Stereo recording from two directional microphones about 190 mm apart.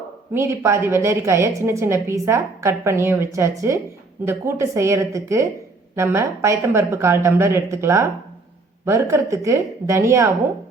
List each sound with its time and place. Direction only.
0.3 s a woman's voice: 15° right (ahead or behind)